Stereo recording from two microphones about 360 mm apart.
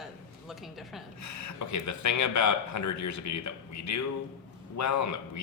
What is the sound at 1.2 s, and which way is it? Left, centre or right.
Speech, left.